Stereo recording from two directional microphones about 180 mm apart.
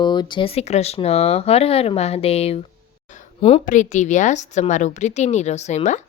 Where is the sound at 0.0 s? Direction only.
25° left (ahead or behind).